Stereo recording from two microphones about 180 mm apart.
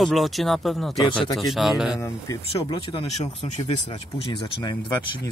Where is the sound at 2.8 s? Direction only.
30° left (ahead or behind).